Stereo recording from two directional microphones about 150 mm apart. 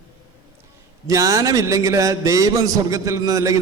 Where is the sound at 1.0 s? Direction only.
20° right (ahead or behind).